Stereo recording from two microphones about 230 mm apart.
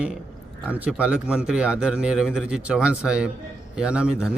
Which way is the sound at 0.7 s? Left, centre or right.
Centre.